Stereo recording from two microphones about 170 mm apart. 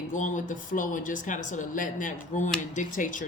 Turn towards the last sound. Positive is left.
turn(degrees=50)  # may be behind; listen again after turning